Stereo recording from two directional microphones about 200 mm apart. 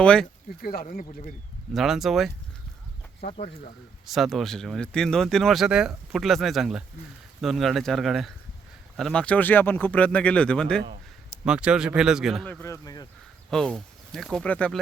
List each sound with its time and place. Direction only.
0.0 s speech: 5° left (ahead or behind)
0.6 s speech: 45° left (ahead or behind)
1.7 s speech: centre (ahead or behind)
3.2 s speech: 35° left (ahead or behind)
4.0 s speech: centre (ahead or behind)
12.5 s speech: 10° left (ahead or behind)
13.5 s speech: centre (ahead or behind)